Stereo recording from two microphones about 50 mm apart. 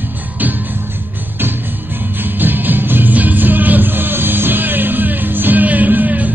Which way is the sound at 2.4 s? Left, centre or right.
Right.